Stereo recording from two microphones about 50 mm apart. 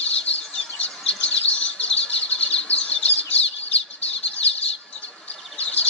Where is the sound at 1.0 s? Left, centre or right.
Left.